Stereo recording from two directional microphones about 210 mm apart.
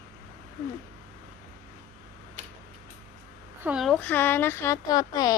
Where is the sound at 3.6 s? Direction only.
5° right (ahead or behind); by 5.3 s 20° left (ahead or behind).